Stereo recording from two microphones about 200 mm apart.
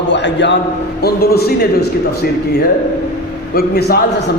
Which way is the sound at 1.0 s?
50° left (ahead or behind).